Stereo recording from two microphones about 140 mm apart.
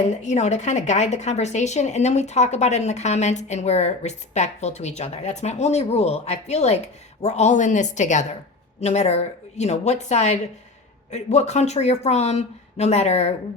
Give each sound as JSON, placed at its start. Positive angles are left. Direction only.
{"t": 0.2, "sound": "a woman's voice", "side_deg": 55}